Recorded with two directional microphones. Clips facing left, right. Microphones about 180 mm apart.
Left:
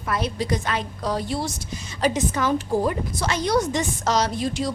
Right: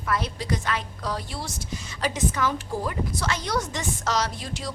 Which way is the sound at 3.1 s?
15° left (ahead or behind).